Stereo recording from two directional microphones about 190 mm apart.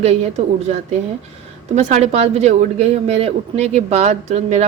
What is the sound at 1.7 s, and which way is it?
Speech, 35° right (ahead or behind).